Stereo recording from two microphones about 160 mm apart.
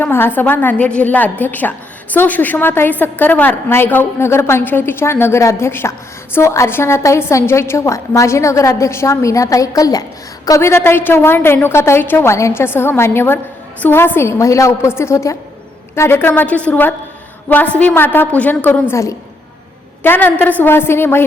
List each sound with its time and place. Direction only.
0.0 s a woman's voice: 15° left (ahead or behind)